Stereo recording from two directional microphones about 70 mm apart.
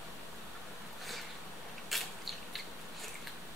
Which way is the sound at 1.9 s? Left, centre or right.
Centre.